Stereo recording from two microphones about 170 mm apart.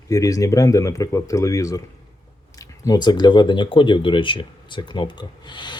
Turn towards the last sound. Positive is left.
turn(degrees=25)  # may be behind; listen again after turning